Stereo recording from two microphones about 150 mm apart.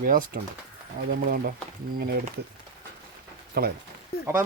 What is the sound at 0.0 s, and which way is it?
Speech, 65° right (ahead or behind).